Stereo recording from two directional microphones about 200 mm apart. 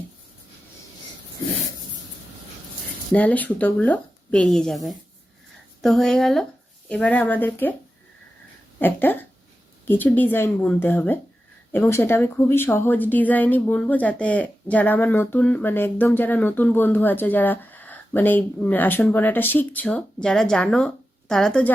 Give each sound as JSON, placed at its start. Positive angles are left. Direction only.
{"t": 3.1, "sound": "speech", "side_deg": 5}
{"t": 8.8, "sound": "a woman's voice", "side_deg": 10}